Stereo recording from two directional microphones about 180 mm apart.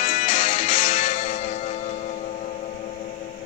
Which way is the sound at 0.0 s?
45° left (ahead or behind).